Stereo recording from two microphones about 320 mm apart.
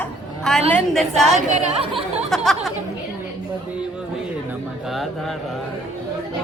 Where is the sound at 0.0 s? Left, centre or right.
Centre.